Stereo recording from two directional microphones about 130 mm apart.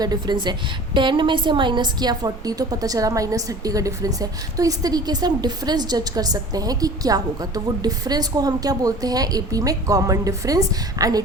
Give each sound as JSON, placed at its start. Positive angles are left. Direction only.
{"t": 0.0, "sound": "a woman's voice", "side_deg": -30}